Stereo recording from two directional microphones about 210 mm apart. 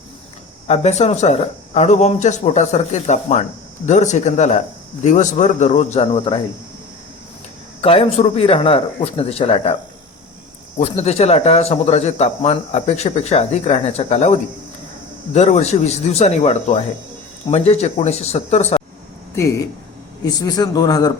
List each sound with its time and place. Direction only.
0.7 s speech: 30° left (ahead or behind)
7.8 s a man's voice: 25° left (ahead or behind)
10.8 s speech: 30° left (ahead or behind)
20.2 s a man's voice: 20° left (ahead or behind)